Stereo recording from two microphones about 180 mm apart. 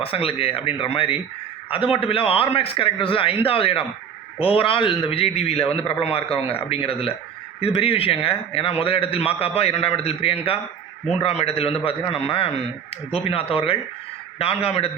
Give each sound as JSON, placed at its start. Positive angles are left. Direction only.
{"t": 0.0, "sound": "a man's voice", "side_deg": 30}